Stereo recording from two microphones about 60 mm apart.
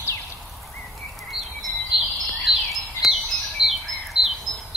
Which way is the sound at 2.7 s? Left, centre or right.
Centre.